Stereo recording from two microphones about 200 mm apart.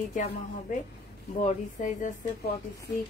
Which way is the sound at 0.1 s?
40° left (ahead or behind).